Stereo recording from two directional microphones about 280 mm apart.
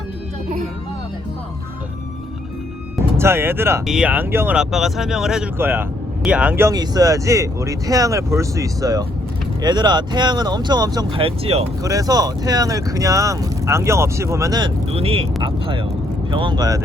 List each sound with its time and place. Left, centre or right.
3.2 s speech: centre